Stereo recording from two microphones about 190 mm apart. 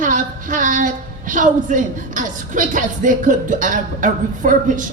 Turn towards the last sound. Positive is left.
turn(degrees=-45)  # may be behind; listen again after turning